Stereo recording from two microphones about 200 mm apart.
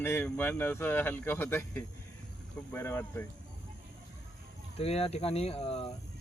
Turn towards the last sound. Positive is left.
turn(degrees=30)  # may be behind; listen again after turning